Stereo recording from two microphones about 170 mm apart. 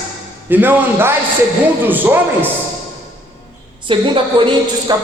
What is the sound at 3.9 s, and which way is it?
A woman's voice, 30° right (ahead or behind).